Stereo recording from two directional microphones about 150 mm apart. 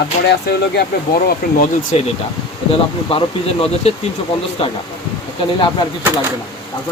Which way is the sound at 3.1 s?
40° left (ahead or behind).